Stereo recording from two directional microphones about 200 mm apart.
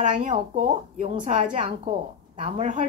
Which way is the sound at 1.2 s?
40° right (ahead or behind).